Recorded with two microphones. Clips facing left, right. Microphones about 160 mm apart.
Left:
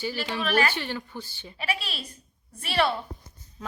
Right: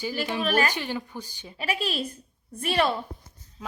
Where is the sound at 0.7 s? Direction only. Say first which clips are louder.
Right 1 dB; 15° right (ahead or behind).